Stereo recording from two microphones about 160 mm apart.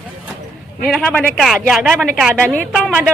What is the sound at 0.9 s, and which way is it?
Speech, 5° left (ahead or behind).